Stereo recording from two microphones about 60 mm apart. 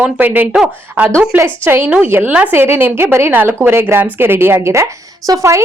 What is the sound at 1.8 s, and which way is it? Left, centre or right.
A woman's voice, right.